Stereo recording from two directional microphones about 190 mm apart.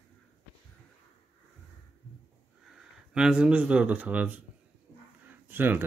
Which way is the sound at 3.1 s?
5° right (ahead or behind).